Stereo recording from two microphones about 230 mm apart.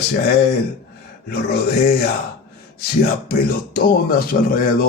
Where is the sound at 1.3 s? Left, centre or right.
Left.